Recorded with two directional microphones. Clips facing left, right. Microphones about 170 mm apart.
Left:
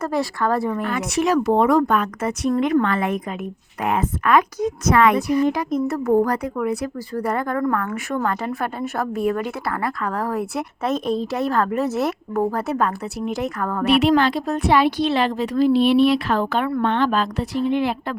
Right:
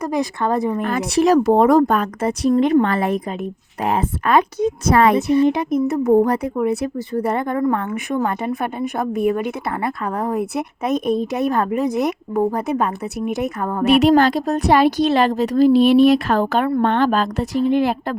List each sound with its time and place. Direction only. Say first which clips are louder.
0.0 s a woman's voice: right 1 dB; 15° right (ahead or behind)
0.9 s a woman's voice: right 7 dB; 35° right (ahead or behind); by 13.8 s 20° right (ahead or behind)
13.8 s a woman's voice: right 4 dB; 45° right (ahead or behind)